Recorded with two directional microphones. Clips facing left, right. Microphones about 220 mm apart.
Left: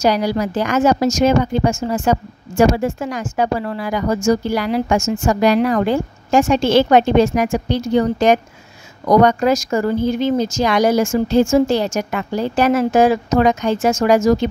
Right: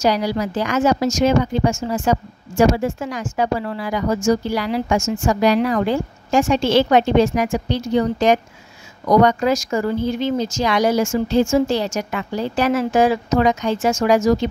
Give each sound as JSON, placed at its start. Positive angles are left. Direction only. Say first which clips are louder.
{"t": 0.0, "sound": "a woman's voice", "louder": "left 2 dB", "side_deg": 50}